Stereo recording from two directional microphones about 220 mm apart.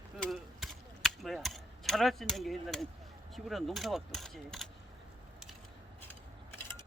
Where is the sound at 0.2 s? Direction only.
Centre (ahead or behind).